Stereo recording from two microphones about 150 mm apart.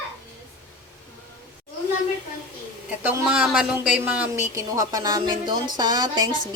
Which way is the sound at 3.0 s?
5° right (ahead or behind).